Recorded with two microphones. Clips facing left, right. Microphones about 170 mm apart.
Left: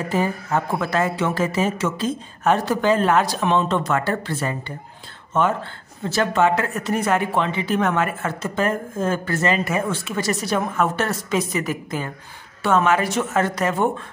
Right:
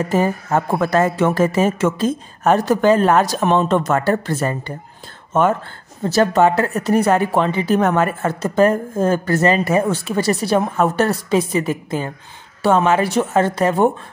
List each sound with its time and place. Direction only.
0.1 s speech: 45° right (ahead or behind)
6.0 s speech: 40° right (ahead or behind)